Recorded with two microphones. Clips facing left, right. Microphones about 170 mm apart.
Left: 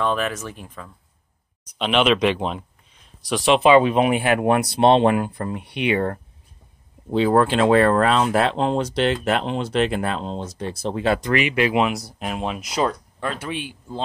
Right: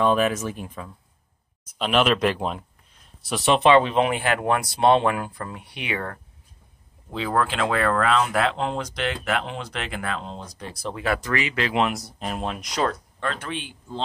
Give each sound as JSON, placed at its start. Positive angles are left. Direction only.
{"t": 0.0, "sound": "speech", "side_deg": 0}
{"t": 3.6, "sound": "speech", "side_deg": 10}